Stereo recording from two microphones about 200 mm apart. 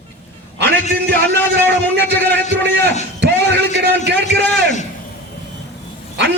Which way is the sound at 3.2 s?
55° right (ahead or behind).